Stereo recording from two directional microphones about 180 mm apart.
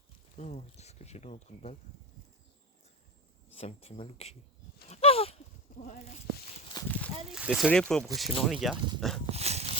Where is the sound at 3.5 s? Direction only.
35° left (ahead or behind).